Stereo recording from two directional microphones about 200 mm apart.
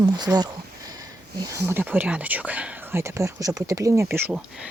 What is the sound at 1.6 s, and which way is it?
Speech, 10° right (ahead or behind).